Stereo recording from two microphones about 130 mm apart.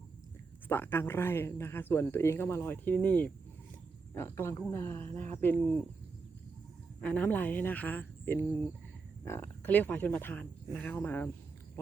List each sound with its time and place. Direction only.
0.7 s speech: 15° left (ahead or behind)
7.0 s speech: 10° left (ahead or behind)